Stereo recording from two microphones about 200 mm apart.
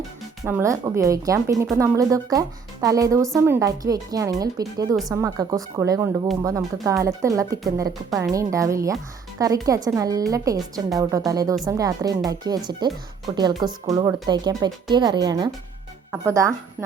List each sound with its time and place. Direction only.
0.4 s a woman's voice: 10° right (ahead or behind)